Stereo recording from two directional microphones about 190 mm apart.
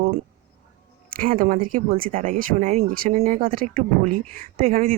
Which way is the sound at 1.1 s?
45° right (ahead or behind).